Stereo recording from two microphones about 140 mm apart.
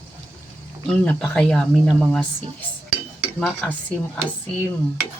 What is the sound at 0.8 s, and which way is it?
Cutlery, 10° left (ahead or behind).